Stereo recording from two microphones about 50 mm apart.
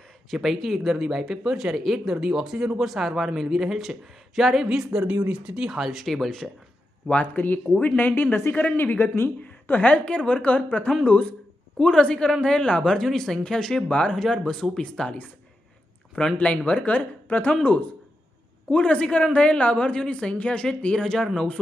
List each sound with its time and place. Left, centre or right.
0.3 s speech: centre
4.6 s speech: centre
5.0 s speech: right
5.7 s speech: centre
6.0 s speech: centre
7.1 s speech: left
10.0 s speech: left
11.8 s speech: centre
14.1 s speech: centre
16.3 s speech: left
18.7 s speech: left